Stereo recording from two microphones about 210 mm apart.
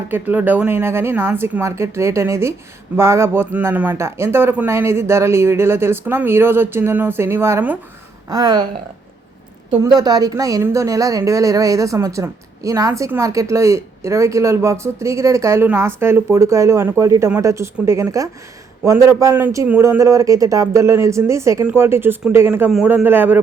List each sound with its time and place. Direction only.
0.1 s a woman's voice: 10° right (ahead or behind)
9.8 s a woman's voice: 20° right (ahead or behind)